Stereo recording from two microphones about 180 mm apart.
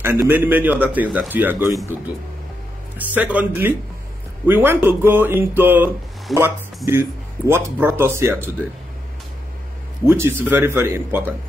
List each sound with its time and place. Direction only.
0.0 s speech: 10° right (ahead or behind)
3.2 s speech: 10° right (ahead or behind)
6.3 s speech: centre (ahead or behind)
6.9 s speech: 15° right (ahead or behind)
10.0 s speech: 15° right (ahead or behind)